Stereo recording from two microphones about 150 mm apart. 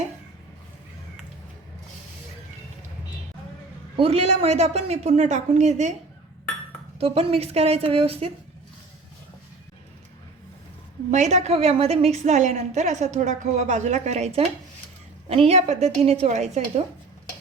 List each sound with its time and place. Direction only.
3.9 s a woman's voice: 40° right (ahead or behind)
7.0 s a woman's voice: 40° right (ahead or behind)
11.1 s a woman's voice: 50° right (ahead or behind)